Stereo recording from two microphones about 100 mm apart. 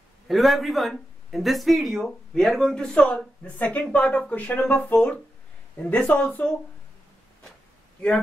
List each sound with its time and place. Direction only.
0.3 s speech: centre (ahead or behind)